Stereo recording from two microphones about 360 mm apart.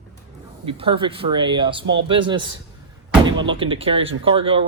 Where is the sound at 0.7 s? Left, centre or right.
Centre.